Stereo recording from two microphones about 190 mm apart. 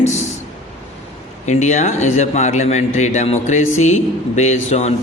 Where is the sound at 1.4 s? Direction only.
40° left (ahead or behind).